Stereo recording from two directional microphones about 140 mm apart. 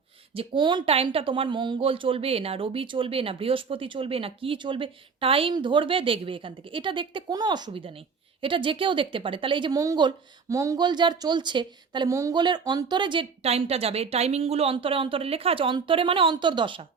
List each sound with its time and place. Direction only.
0.3 s speech: 35° right (ahead or behind)
13.4 s speech: 45° right (ahead or behind)